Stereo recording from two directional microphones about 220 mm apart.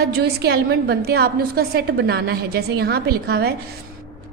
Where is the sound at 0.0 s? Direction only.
45° right (ahead or behind).